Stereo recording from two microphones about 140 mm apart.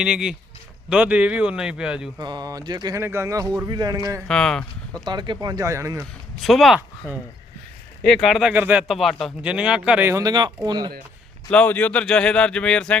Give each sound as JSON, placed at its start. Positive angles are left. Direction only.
{"t": 0.0, "sound": "a man's voice", "side_deg": -5}
{"t": 2.1, "sound": "speech", "side_deg": -30}
{"t": 3.0, "sound": "speech", "side_deg": -20}
{"t": 4.3, "sound": "speech", "side_deg": 5}
{"t": 5.0, "sound": "speech", "side_deg": -35}
{"t": 6.4, "sound": "a man's voice", "side_deg": 0}
{"t": 10.1, "sound": "speech", "side_deg": -25}
{"t": 11.5, "sound": "speech", "side_deg": 10}